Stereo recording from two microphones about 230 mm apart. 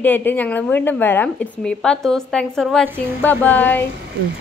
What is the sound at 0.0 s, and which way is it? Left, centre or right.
A woman's voice, centre.